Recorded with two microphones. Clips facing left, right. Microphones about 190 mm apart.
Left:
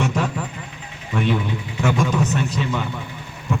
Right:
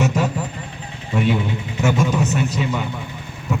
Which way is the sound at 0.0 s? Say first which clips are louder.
Right 2 dB; 5° right (ahead or behind).